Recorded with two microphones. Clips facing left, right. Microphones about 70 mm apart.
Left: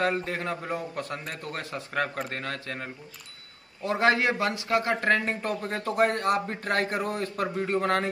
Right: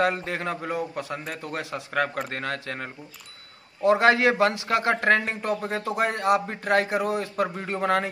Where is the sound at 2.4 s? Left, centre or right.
Right.